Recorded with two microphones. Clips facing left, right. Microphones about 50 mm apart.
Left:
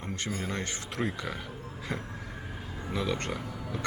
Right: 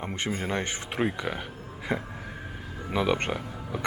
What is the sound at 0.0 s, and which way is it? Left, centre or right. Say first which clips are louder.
Speech: right 4 dB; right.